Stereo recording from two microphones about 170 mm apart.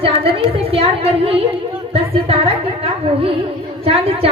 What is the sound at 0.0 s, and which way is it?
A woman's voice, 35° right (ahead or behind).